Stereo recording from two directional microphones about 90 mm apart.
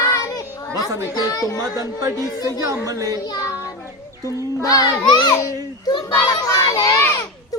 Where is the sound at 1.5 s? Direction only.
35° right (ahead or behind).